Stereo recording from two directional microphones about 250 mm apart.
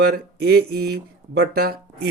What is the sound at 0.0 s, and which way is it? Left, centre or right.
Speech, right.